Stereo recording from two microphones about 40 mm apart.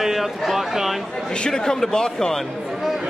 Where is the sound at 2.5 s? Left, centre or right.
Centre.